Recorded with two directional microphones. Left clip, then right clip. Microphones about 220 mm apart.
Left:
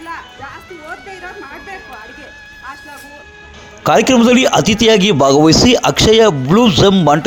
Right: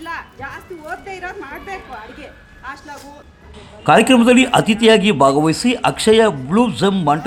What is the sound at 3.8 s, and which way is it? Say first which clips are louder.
A man's voice: left 1 dB; 30° left (ahead or behind).